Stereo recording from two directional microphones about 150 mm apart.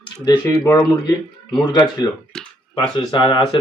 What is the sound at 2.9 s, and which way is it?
Speech, 30° left (ahead or behind).